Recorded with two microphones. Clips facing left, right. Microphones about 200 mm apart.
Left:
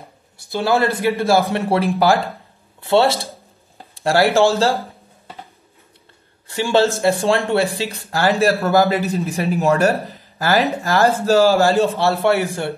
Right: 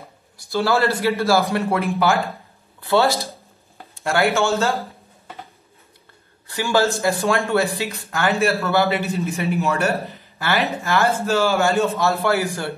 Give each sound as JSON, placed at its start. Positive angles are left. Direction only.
{"t": 0.5, "sound": "a man's voice", "side_deg": 15}
{"t": 1.7, "sound": "speech", "side_deg": 35}
{"t": 6.5, "sound": "speech", "side_deg": 30}